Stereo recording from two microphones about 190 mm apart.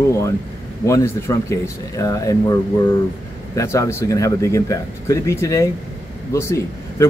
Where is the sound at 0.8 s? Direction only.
15° left (ahead or behind).